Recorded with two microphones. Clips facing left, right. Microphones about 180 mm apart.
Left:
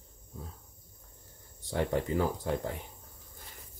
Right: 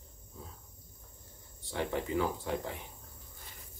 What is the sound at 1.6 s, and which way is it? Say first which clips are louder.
Speech: left 4 dB; 40° left (ahead or behind).